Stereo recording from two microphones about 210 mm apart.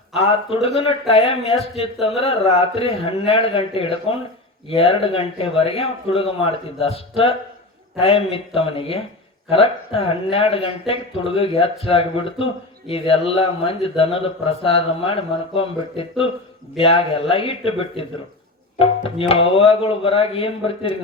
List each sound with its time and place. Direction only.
0.1 s a man's voice: 25° left (ahead or behind)
18.8 s music: 25° left (ahead or behind)
19.3 s a man's voice: 25° left (ahead or behind)